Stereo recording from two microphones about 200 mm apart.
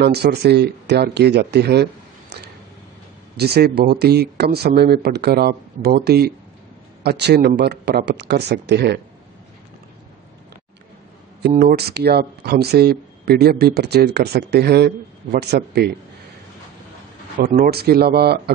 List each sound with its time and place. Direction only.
0.0 s speech: 55° right (ahead or behind)
11.4 s speech: 50° right (ahead or behind)
17.4 s speech: 45° right (ahead or behind)